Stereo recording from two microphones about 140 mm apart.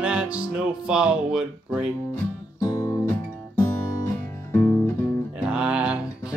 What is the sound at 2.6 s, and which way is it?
Music, 30° left (ahead or behind).